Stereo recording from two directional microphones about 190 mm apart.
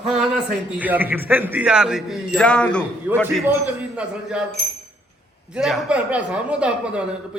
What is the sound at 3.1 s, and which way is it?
Speech, 10° right (ahead or behind).